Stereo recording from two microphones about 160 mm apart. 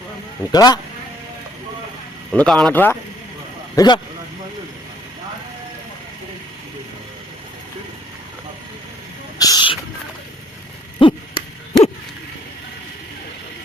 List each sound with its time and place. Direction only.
0.5 s speech: 25° left (ahead or behind)
2.3 s speech: 5° left (ahead or behind)
3.8 s speech: 25° left (ahead or behind)
9.4 s a sound: 25° left (ahead or behind)
11.0 s owl: 30° left (ahead or behind)